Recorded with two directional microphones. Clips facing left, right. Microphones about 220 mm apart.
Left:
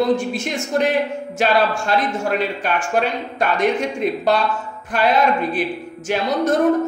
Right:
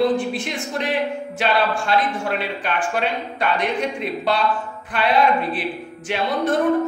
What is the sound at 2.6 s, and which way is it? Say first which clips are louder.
Speech: left 3 dB; 45° left (ahead or behind).